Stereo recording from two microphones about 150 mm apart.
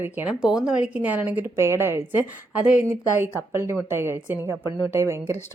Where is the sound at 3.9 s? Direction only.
15° right (ahead or behind).